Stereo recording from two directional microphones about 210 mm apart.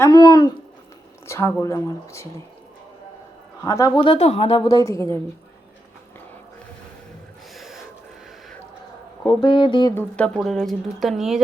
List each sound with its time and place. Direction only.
0.0 s a woman's voice: 20° left (ahead or behind)
3.6 s a woman's voice: 15° left (ahead or behind)
7.5 s gasp: centre (ahead or behind)
9.2 s speech: 20° left (ahead or behind)
9.9 s speech: 5° left (ahead or behind)